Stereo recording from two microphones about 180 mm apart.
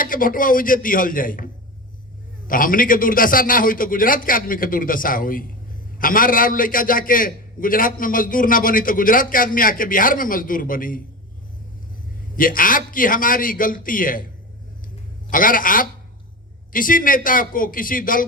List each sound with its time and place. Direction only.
0.0 s a man's voice: 50° left (ahead or behind)
2.5 s a man's voice: 50° left (ahead or behind)
12.4 s a man's voice: 50° left (ahead or behind)
15.3 s a man's voice: 50° left (ahead or behind)